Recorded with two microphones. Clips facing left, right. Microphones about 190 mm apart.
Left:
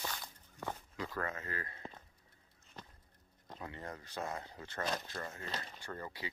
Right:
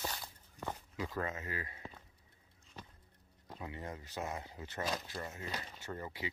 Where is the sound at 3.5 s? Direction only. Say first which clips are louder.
Right 1 dB; 15° right (ahead or behind).